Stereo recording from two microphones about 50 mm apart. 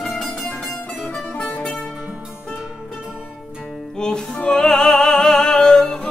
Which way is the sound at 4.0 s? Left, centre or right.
Centre.